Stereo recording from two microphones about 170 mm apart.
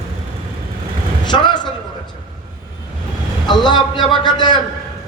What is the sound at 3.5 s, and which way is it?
A man's voice, 25° left (ahead or behind).